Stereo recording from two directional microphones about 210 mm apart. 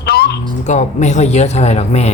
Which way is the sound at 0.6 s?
35° left (ahead or behind).